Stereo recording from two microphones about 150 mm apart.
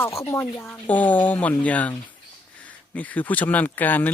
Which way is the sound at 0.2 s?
20° left (ahead or behind).